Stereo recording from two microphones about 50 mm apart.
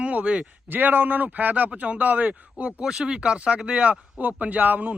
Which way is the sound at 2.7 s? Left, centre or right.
Centre.